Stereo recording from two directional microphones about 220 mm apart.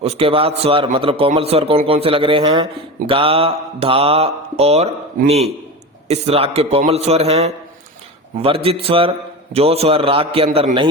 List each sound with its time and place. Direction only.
0.0 s a man's voice: 25° right (ahead or behind)
6.1 s a man's voice: 30° right (ahead or behind)